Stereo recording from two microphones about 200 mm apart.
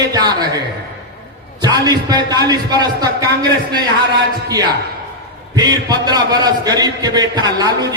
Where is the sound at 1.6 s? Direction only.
20° right (ahead or behind).